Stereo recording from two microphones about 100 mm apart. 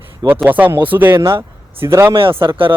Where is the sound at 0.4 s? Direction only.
20° right (ahead or behind).